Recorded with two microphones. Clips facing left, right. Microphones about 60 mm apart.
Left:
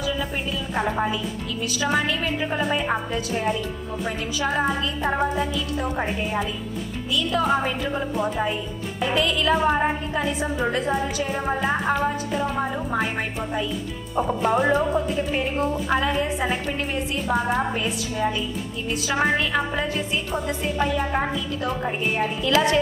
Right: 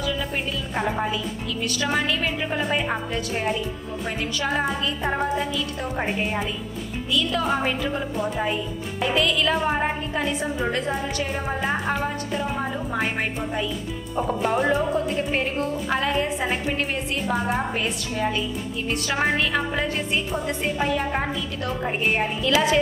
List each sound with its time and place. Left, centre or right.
0.7 s a woman's voice: centre
4.4 s a woman's voice: centre
7.3 s a woman's voice: centre
14.1 s a woman's voice: centre